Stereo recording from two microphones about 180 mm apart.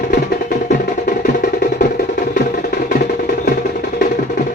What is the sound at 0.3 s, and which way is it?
Music, 50° left (ahead or behind).